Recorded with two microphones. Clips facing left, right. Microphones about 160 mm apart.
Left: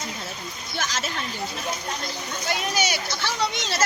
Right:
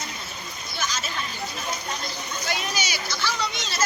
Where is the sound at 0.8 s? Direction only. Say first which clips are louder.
Left 2 dB; 90° left.